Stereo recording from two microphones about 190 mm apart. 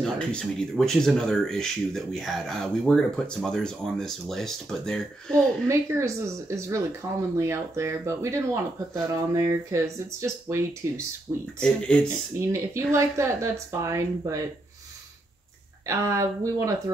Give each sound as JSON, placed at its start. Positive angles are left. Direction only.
{"t": 0.0, "sound": "speech", "side_deg": 5}
{"t": 5.7, "sound": "speech", "side_deg": -15}
{"t": 11.6, "sound": "speech", "side_deg": 5}
{"t": 12.4, "sound": "speech", "side_deg": -15}
{"t": 15.9, "sound": "speech", "side_deg": -15}